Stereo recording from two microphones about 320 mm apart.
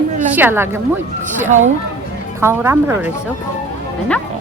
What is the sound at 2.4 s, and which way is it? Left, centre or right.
Speech, centre.